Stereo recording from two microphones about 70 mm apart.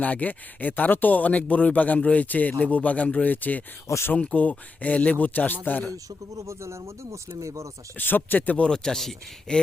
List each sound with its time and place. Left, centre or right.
0.0 s speech: left
3.8 s speech: left
4.1 s speech: centre
5.9 s speech: right
7.9 s speech: left; by 9.6 s centre